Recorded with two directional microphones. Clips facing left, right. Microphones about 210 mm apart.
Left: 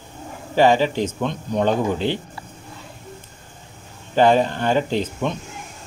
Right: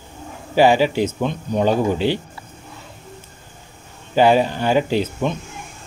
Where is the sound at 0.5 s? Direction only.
10° right (ahead or behind).